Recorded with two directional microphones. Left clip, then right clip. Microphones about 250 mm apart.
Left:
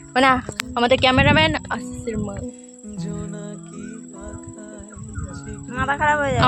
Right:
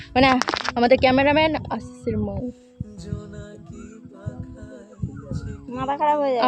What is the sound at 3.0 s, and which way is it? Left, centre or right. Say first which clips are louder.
Music: left 6 dB; left.